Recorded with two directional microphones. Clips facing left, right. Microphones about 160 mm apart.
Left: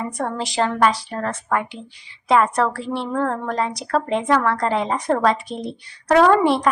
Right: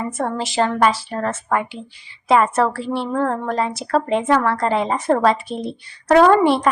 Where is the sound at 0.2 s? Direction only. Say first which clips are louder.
Right 2 dB; centre (ahead or behind).